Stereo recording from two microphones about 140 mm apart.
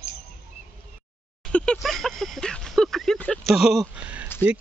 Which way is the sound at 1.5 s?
5° left (ahead or behind).